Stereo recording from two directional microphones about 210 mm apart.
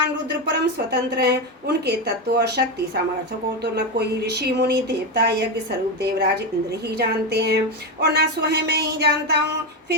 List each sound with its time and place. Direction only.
0.4 s speech: 50° right (ahead or behind)
6.9 s speech: 50° right (ahead or behind)